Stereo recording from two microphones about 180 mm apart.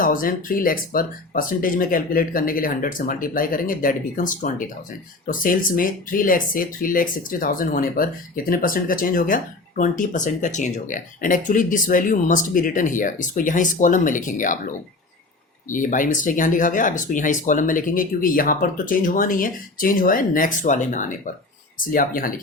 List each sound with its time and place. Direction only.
0.0 s speech: 50° left (ahead or behind)
15.7 s speech: 45° left (ahead or behind)